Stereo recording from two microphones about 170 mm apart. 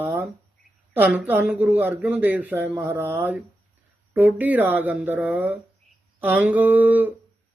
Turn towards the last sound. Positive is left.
turn(degrees=-10)  # may be behind; listen again after turning